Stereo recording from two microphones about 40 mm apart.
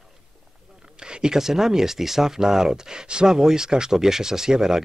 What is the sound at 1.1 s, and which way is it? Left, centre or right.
Speech, centre.